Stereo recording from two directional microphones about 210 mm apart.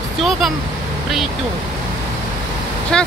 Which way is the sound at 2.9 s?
5° left (ahead or behind).